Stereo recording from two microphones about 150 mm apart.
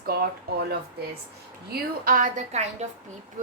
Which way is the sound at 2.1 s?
60° right (ahead or behind).